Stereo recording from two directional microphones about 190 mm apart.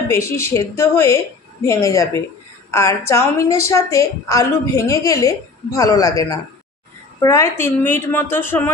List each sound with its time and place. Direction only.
0.1 s a woman's voice: 15° left (ahead or behind)